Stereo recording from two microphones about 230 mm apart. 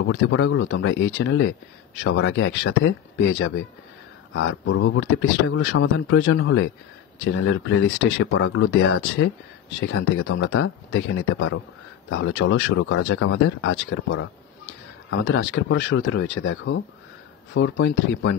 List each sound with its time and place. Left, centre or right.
0.0 s speech: left